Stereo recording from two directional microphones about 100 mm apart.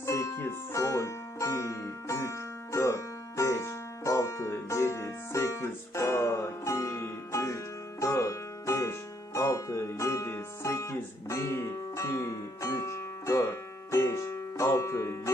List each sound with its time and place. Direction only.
0.0 s music: 30° left (ahead or behind)